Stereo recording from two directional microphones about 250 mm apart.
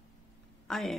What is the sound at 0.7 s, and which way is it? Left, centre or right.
Speech, centre.